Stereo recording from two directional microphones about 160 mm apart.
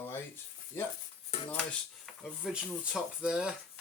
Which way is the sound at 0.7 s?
15° left (ahead or behind).